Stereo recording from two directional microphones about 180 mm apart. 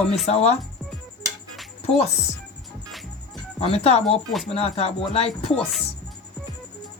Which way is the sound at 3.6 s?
35° left (ahead or behind).